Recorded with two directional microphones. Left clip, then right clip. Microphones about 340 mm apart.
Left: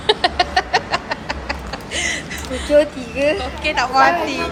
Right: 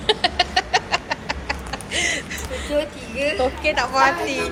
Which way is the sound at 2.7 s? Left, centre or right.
Left.